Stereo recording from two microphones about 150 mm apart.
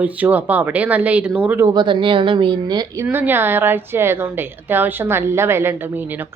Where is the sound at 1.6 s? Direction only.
30° right (ahead or behind).